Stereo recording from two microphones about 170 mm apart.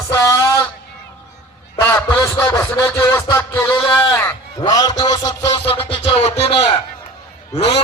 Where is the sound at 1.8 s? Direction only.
15° left (ahead or behind).